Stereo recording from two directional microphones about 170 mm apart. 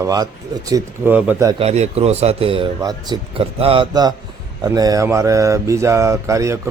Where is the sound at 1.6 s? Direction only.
40° right (ahead or behind); by 4.2 s 25° right (ahead or behind).